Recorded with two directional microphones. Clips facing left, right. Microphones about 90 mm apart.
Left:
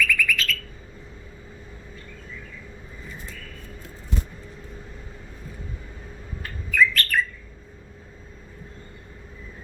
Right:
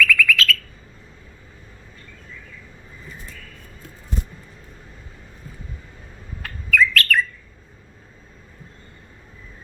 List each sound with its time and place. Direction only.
0.0 s bird: 90° right
6.4 s bird: 85° right